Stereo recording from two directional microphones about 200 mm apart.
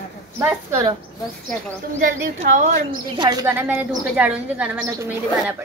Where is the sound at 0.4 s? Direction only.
15° right (ahead or behind).